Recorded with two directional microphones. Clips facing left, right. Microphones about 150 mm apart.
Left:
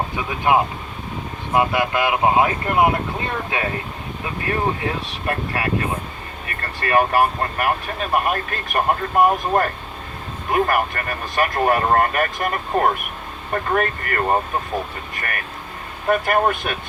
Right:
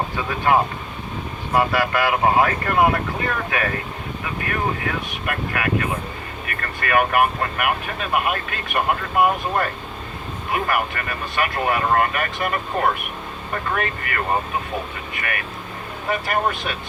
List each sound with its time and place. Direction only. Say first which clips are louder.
0.2 s speech: even; 15° left (ahead or behind); by 16.7 s 50° left (ahead or behind)